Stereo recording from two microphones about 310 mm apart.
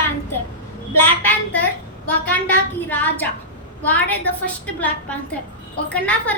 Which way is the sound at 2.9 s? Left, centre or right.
Centre.